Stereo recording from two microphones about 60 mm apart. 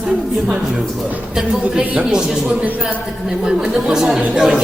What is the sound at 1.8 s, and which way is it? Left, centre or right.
A woman's voice, right.